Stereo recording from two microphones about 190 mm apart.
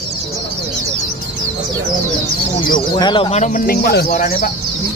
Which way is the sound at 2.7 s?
25° left (ahead or behind).